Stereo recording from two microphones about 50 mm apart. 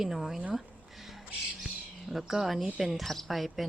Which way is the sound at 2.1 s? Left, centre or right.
Centre.